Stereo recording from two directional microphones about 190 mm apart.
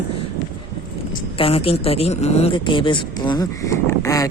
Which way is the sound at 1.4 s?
30° left (ahead or behind).